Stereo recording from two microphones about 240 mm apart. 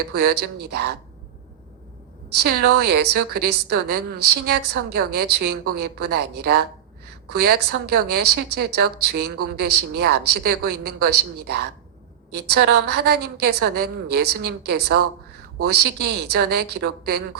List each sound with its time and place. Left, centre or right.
0.1 s a woman's voice: right
2.4 s a woman's voice: right